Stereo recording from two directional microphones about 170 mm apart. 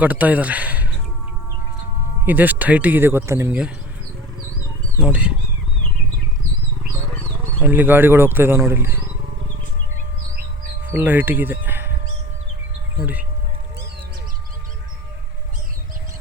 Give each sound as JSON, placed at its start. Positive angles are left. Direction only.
{"t": 0.0, "sound": "speech", "side_deg": -10}
{"t": 2.2, "sound": "speech", "side_deg": -10}
{"t": 4.9, "sound": "speech", "side_deg": -5}
{"t": 7.6, "sound": "speech", "side_deg": -10}
{"t": 10.3, "sound": "bird", "side_deg": -50}
{"t": 10.9, "sound": "speech", "side_deg": -10}